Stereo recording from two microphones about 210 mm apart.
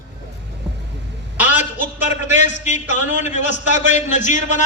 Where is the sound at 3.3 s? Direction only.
35° left (ahead or behind).